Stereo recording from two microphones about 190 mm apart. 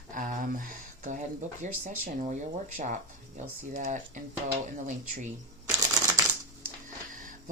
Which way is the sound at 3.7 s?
40° right (ahead or behind).